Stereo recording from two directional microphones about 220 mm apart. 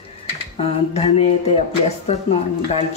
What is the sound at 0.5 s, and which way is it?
Speech, 30° left (ahead or behind).